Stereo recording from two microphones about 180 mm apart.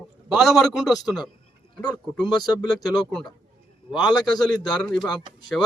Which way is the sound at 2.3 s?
20° left (ahead or behind).